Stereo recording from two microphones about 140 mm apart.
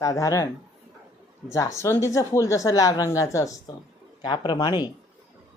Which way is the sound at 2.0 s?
20° left (ahead or behind).